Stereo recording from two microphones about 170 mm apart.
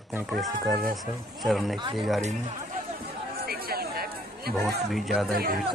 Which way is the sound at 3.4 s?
65° right (ahead or behind).